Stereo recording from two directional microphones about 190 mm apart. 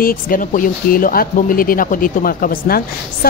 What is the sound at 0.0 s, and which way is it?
A woman's voice, 45° left (ahead or behind).